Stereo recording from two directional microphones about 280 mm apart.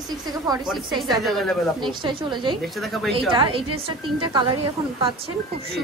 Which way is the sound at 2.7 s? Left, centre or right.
Centre.